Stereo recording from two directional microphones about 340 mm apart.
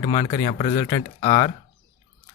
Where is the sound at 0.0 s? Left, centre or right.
Left.